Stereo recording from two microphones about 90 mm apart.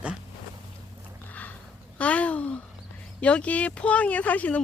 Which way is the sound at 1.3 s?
20° left (ahead or behind).